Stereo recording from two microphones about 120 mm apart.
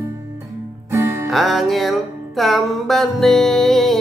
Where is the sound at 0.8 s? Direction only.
25° right (ahead or behind).